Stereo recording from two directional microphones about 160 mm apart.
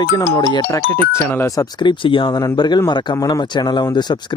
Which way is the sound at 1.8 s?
30° left (ahead or behind).